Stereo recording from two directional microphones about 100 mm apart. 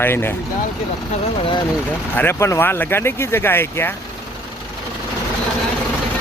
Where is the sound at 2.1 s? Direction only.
20° left (ahead or behind).